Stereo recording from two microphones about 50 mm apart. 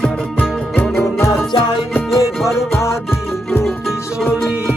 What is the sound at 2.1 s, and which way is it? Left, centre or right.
Music, left.